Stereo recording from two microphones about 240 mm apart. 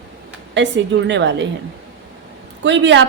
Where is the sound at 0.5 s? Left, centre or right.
Right.